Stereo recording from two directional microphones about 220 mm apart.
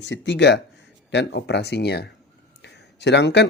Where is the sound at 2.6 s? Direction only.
50° left (ahead or behind).